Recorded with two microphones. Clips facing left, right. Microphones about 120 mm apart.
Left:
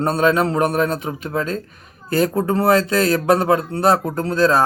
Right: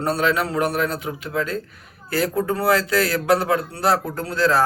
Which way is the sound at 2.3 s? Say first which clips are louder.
Left 2 dB; 25° left (ahead or behind).